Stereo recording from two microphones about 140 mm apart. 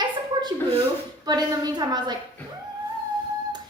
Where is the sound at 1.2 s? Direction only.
30° right (ahead or behind).